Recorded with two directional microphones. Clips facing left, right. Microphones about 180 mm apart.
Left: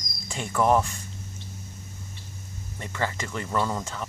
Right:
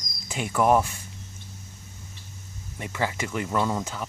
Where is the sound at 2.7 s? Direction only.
10° right (ahead or behind).